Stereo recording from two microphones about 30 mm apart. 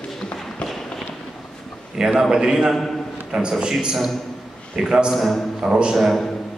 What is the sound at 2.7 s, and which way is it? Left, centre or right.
Speech, centre.